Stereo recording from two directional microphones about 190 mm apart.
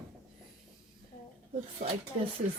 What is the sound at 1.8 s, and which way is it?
Speech, 50° right (ahead or behind).